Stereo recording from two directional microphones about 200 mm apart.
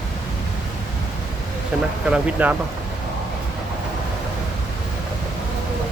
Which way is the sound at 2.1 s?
5° right (ahead or behind).